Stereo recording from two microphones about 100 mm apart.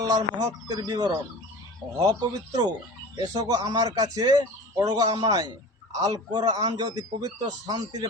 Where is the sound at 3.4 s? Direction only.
35° right (ahead or behind).